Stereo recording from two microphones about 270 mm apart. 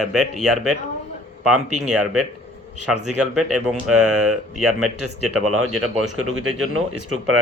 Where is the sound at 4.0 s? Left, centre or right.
Right.